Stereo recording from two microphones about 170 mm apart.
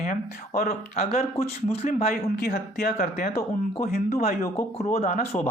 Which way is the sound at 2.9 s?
45° left (ahead or behind).